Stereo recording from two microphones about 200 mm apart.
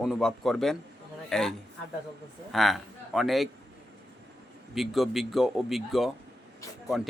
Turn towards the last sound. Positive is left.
turn(degrees=0)  # may be behind; listen again after turning